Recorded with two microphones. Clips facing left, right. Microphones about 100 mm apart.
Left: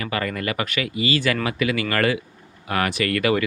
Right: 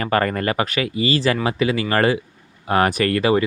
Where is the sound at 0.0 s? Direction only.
45° right (ahead or behind).